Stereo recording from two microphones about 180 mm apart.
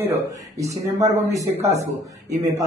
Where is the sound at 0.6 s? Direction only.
20° right (ahead or behind).